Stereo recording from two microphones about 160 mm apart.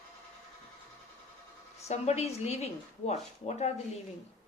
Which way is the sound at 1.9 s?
45° left (ahead or behind).